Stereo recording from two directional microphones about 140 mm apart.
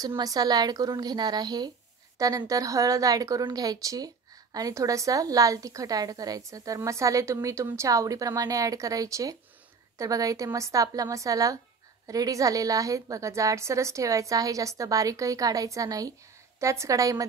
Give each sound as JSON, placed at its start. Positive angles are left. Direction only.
{"t": 0.0, "sound": "a woman's voice", "side_deg": -25}